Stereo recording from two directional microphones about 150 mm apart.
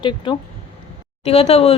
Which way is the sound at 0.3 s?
30° left (ahead or behind).